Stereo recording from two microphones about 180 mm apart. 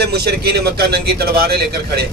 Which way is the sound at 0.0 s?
65° right (ahead or behind).